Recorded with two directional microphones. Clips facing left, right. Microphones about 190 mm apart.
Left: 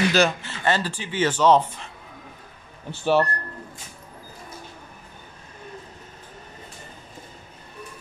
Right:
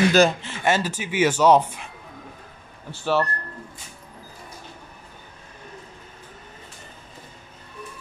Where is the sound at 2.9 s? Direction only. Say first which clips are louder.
Left 2 dB; 15° left (ahead or behind).